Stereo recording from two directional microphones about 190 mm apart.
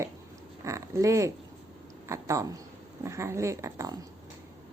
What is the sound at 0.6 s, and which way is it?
Oink, 15° right (ahead or behind).